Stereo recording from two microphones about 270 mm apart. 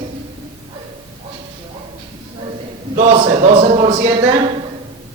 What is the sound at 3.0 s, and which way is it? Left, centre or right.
Speech, right.